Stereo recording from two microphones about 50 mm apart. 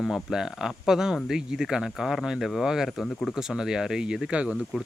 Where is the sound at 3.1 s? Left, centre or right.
Centre.